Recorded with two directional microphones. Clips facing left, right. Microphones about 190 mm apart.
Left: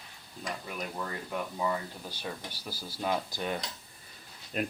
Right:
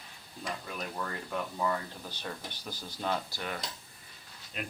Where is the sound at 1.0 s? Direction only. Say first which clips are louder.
Even; 10° left (ahead or behind).